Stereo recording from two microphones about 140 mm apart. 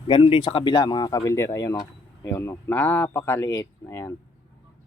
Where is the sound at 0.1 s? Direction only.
35° left (ahead or behind); by 4.1 s 20° left (ahead or behind).